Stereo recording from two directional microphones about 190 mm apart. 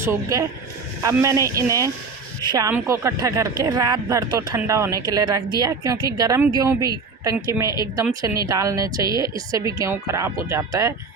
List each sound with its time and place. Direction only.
0.0 s speech: 15° right (ahead or behind)